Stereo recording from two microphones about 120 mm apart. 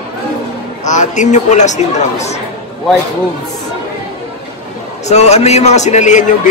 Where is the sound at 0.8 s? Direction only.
90° left; by 2.4 s 70° left (ahead or behind).